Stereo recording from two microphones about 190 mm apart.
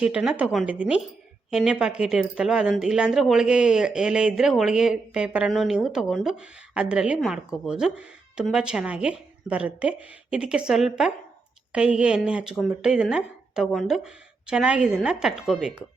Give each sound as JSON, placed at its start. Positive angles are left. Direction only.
{"t": 0.0, "sound": "speech", "side_deg": -5}